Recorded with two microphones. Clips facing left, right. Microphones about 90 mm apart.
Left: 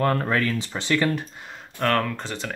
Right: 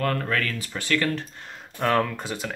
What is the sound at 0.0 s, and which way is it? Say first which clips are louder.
Speech: left 3 dB; 25° left (ahead or behind).